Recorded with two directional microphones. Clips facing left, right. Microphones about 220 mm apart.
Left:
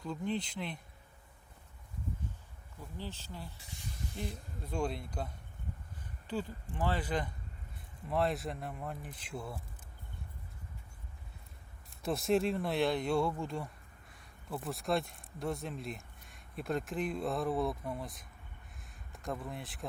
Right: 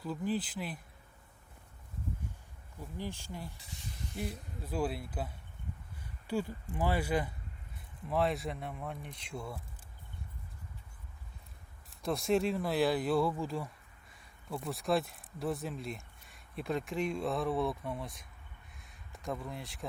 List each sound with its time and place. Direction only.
0.0 s speech: 5° right (ahead or behind)
3.0 s speech: 15° right (ahead or behind); by 9.6 s 5° left (ahead or behind)
12.0 s speech: centre (ahead or behind)
18.8 s a sound: centre (ahead or behind)